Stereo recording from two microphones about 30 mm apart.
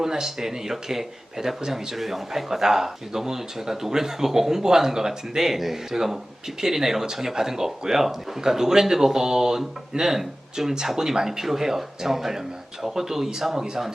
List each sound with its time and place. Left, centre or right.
0.0 s speech: centre